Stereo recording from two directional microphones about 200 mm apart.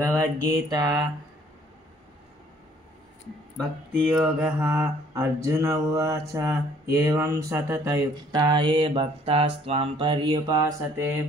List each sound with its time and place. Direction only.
0.0 s mantra: 15° right (ahead or behind)
4.1 s mantra: 5° right (ahead or behind)
6.3 s speech: 15° right (ahead or behind)